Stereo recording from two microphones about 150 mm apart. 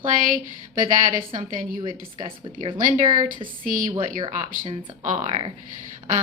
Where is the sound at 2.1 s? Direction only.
35° right (ahead or behind).